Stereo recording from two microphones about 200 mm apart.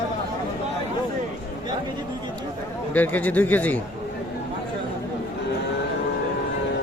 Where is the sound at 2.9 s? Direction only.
10° left (ahead or behind).